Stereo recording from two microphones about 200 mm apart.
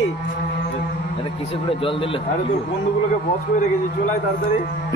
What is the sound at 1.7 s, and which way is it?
Speech, 25° left (ahead or behind).